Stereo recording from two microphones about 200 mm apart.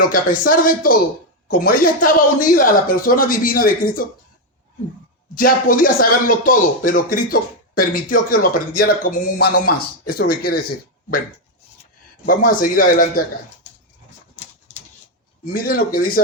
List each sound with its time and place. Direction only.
0.1 s speech: 45° left (ahead or behind)
5.3 s speech: 45° left (ahead or behind)
12.2 s speech: 45° left (ahead or behind)
15.5 s speech: 45° left (ahead or behind)